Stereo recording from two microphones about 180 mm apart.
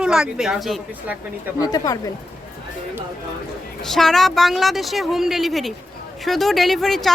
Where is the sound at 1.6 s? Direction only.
20° left (ahead or behind).